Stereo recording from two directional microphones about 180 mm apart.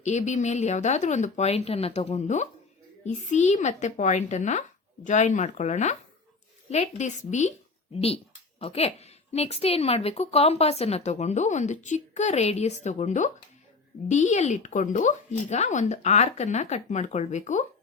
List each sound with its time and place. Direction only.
0.0 s speech: 40° left (ahead or behind)